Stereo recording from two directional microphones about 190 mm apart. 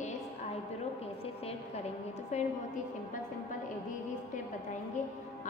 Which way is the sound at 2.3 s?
35° left (ahead or behind).